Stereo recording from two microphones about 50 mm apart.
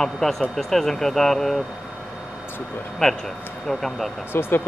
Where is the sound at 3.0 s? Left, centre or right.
Centre.